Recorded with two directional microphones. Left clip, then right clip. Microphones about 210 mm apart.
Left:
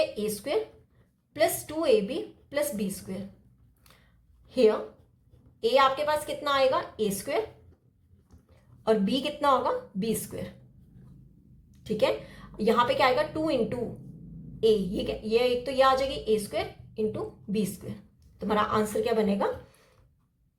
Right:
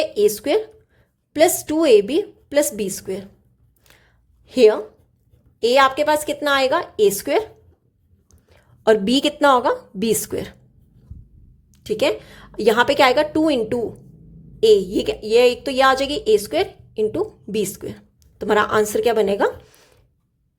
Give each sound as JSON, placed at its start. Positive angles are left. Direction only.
{"t": 0.0, "sound": "a woman's voice", "side_deg": -55}
{"t": 4.4, "sound": "a woman's voice", "side_deg": -55}
{"t": 8.4, "sound": "a woman's voice", "side_deg": -55}
{"t": 11.7, "sound": "a woman's voice", "side_deg": -45}